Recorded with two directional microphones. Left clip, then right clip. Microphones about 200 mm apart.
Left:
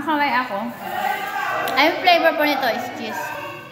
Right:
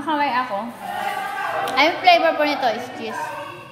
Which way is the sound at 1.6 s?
15° right (ahead or behind).